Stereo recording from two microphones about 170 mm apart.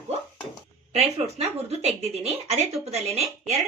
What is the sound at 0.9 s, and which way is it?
Speech, 40° right (ahead or behind).